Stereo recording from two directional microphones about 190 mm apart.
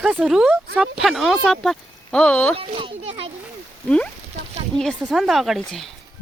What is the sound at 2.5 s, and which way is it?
Speech, 30° right (ahead or behind).